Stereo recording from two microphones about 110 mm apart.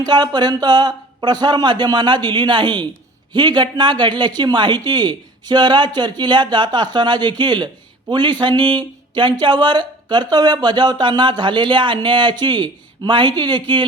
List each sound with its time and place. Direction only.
0.0 s speech: 40° right (ahead or behind)